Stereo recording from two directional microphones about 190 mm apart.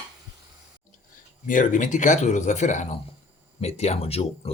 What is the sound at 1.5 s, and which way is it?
Speech, 45° left (ahead or behind).